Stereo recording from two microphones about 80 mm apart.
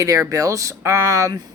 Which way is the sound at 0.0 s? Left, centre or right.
Right.